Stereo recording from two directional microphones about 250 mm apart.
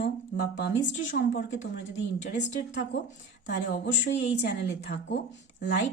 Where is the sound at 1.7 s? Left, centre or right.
Left.